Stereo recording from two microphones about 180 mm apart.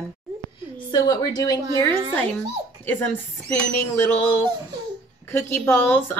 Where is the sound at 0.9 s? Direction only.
20° left (ahead or behind).